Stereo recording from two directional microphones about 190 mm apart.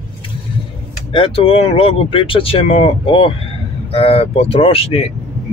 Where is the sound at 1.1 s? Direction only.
30° left (ahead or behind).